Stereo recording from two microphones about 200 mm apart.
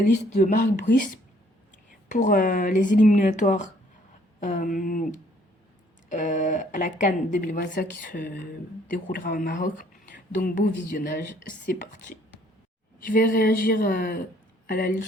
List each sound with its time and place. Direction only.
0.0 s speech: 40° left (ahead or behind)